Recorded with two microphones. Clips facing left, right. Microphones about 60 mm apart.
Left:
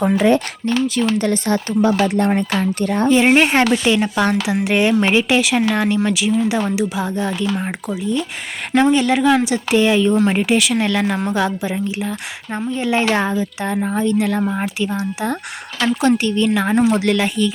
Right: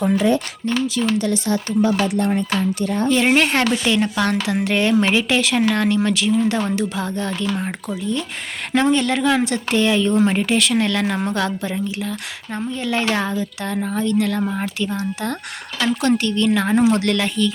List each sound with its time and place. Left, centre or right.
0.2 s speech: left
3.1 s a woman's voice: centre